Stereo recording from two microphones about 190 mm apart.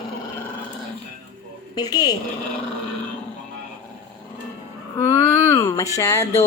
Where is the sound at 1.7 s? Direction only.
20° left (ahead or behind).